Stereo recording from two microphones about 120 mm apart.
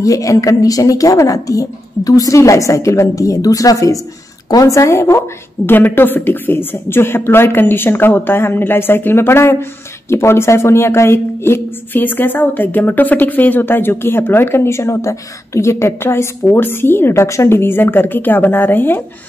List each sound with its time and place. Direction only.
0.0 s a woman's voice: 30° left (ahead or behind)